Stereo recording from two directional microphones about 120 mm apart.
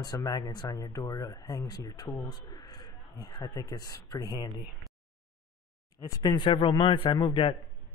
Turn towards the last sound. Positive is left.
turn(degrees=45)  # may be behind; listen again after turning